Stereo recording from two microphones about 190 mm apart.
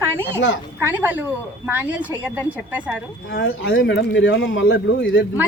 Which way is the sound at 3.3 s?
80° left.